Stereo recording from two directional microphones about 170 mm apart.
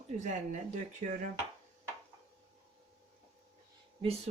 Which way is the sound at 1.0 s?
50° right (ahead or behind).